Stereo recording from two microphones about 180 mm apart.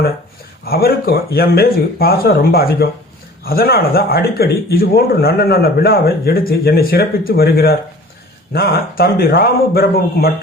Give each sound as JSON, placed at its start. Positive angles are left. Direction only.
{"t": 0.6, "sound": "speech", "side_deg": 60}